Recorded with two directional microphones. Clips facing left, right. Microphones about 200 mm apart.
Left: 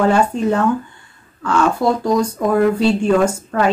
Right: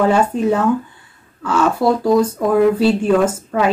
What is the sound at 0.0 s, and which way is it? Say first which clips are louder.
Speech: even; 5° right (ahead or behind).